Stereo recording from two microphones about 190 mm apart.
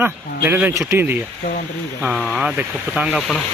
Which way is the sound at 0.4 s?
10° right (ahead or behind).